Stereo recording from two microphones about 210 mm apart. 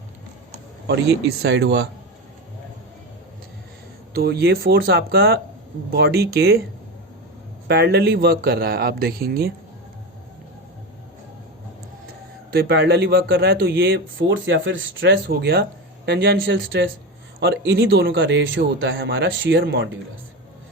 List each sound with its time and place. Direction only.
0.9 s speech: 50° right (ahead or behind)
4.1 s speech: 50° right (ahead or behind)
7.7 s speech: 50° right (ahead or behind)
12.0 s speech: 45° right (ahead or behind)